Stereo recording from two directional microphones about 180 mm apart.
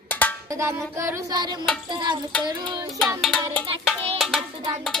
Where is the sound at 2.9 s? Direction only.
Centre (ahead or behind).